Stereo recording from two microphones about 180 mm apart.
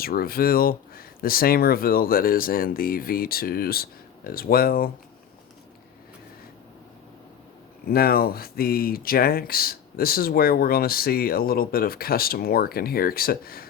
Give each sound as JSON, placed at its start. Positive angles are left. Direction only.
{"t": 0.0, "sound": "speech", "side_deg": 55}
{"t": 7.9, "sound": "speech", "side_deg": 55}